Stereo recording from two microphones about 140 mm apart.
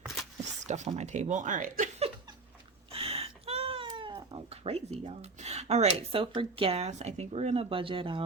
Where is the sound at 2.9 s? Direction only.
45° right (ahead or behind).